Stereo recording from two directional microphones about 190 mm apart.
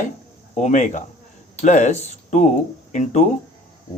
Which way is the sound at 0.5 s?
40° left (ahead or behind).